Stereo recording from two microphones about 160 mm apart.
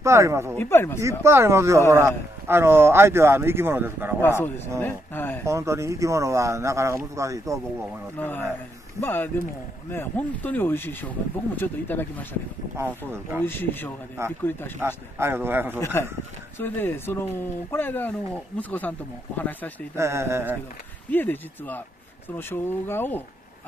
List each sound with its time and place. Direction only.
0.0 s speech: 20° right (ahead or behind)
0.6 s speech: 15° left (ahead or behind)
1.2 s speech: 15° right (ahead or behind)
4.2 s speech: 15° left (ahead or behind)
5.4 s speech: 20° right (ahead or behind)
8.2 s speech: 10° left (ahead or behind)
12.7 s speech: 15° right (ahead or behind)
13.4 s speech: 15° left (ahead or behind)
14.2 s speech: 15° right (ahead or behind)
15.8 s speech: 15° left (ahead or behind)
20.0 s speech: 15° right (ahead or behind)
21.1 s speech: 10° left (ahead or behind)